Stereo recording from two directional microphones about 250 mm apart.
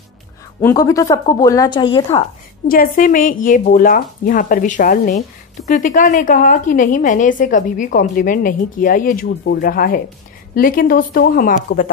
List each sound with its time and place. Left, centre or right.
0.6 s a woman's voice: centre
2.7 s a woman's voice: left